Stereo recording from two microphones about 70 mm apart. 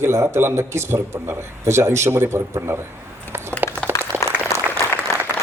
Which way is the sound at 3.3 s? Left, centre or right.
Right.